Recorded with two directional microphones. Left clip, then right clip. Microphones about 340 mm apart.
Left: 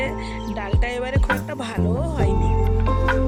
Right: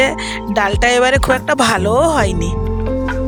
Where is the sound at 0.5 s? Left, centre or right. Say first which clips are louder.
Right 15 dB; right.